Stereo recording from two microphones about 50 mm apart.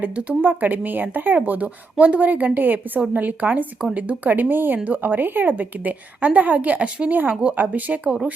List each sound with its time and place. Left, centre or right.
0.0 s speech: right
7.1 s speech: right